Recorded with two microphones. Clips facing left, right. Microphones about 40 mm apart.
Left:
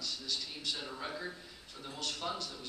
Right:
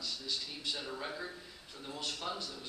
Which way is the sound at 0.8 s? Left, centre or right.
Centre.